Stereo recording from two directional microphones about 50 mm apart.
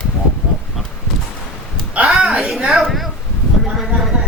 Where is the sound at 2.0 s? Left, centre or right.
Centre.